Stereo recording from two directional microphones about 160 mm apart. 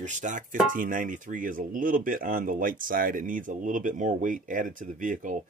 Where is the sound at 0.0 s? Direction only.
50° right (ahead or behind).